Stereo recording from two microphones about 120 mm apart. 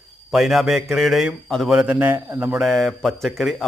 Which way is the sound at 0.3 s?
Centre (ahead or behind).